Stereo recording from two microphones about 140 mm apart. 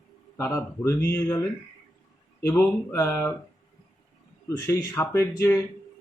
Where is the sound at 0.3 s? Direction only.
20° left (ahead or behind).